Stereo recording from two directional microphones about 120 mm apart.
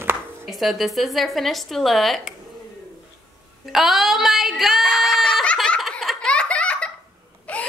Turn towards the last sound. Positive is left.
turn(degrees=10)  # may be behind; listen again after turning